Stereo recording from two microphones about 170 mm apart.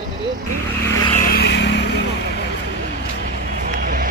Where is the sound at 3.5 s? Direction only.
50° right (ahead or behind).